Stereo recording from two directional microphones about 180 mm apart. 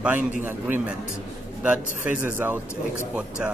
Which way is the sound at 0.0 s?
10° right (ahead or behind).